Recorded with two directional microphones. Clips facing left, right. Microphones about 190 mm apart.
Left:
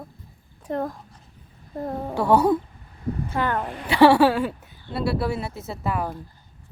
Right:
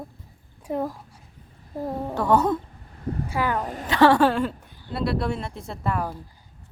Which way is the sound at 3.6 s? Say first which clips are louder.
Right 1 dB; 40° right (ahead or behind).